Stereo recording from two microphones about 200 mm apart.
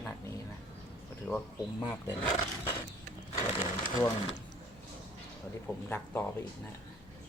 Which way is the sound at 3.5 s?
25° left (ahead or behind).